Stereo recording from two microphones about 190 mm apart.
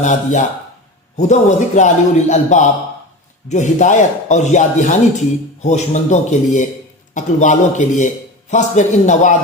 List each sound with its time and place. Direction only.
0.0 s a man's voice: 40° left (ahead or behind)